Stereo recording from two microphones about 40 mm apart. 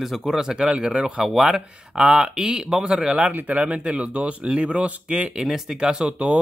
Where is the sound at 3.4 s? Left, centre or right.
Right.